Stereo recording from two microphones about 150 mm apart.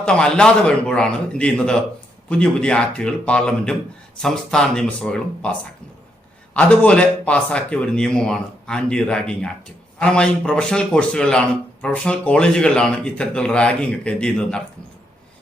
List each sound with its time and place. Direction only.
0.0 s a man's voice: 5° left (ahead or behind)